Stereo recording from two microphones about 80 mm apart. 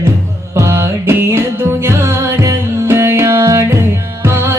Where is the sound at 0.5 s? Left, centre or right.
Right.